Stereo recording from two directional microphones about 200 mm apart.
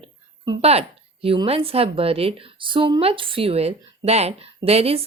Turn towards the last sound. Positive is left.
turn(degrees=-30)  # may be behind; listen again after turning